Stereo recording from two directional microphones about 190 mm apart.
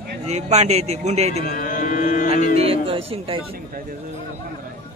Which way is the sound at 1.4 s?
50° left (ahead or behind).